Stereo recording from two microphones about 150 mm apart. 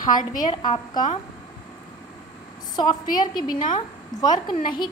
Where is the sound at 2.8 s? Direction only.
30° left (ahead or behind).